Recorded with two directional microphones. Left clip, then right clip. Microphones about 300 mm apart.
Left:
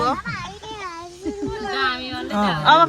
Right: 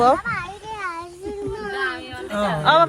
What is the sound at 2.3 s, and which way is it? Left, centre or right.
Speech, centre.